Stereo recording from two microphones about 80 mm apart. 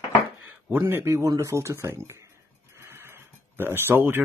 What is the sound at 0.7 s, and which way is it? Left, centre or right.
Speech, right.